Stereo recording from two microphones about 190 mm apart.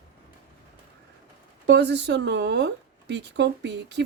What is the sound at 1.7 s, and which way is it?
Speech, 65° right (ahead or behind).